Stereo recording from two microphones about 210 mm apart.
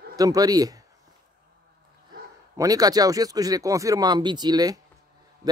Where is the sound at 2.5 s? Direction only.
15° right (ahead or behind).